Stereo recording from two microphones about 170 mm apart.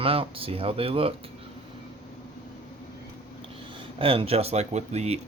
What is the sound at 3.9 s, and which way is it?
Speech, 35° right (ahead or behind).